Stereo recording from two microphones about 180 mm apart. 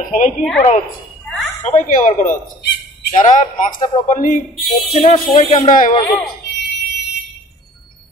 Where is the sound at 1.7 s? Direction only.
40° left (ahead or behind).